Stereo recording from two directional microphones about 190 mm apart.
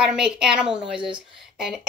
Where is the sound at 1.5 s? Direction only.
Centre (ahead or behind).